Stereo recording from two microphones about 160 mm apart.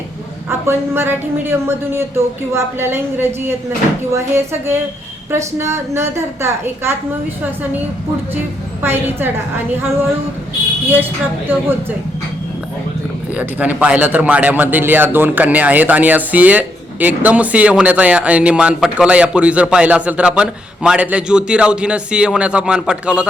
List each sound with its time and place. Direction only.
0.7 s a man's voice: 15° right (ahead or behind)
8.8 s a man's voice: 15° right (ahead or behind)
10.8 s a man's voice: 10° right (ahead or behind)
13.3 s a man's voice: 10° right (ahead or behind)